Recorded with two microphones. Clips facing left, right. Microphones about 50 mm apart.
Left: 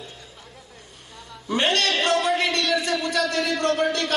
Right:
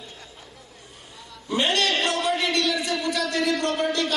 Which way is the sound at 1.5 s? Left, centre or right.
Left.